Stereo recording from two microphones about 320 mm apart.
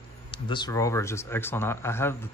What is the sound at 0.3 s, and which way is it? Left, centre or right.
Speech, centre.